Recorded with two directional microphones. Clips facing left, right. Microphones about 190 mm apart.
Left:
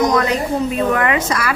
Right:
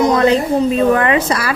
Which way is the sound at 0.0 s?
30° right (ahead or behind).